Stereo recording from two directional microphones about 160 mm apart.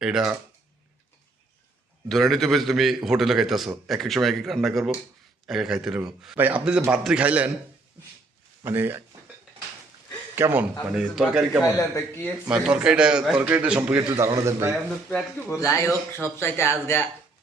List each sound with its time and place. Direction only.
0.0 s a man's voice: 5° right (ahead or behind)
2.0 s a man's voice: centre (ahead or behind)
8.6 s a man's voice: 15° right (ahead or behind)
10.3 s a man's voice: 15° right (ahead or behind)
11.6 s a man's voice: 20° left (ahead or behind)
12.5 s a man's voice: 5° right (ahead or behind)
15.6 s speech: 20° left (ahead or behind)